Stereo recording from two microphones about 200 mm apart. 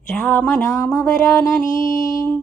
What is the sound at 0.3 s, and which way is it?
Music, 10° left (ahead or behind).